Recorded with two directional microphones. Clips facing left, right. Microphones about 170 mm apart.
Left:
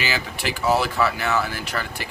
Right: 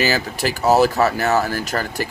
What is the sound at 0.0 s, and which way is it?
Speech, 40° right (ahead or behind).